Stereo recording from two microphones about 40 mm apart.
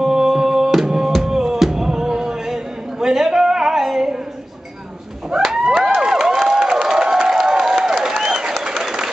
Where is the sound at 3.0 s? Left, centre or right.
Centre.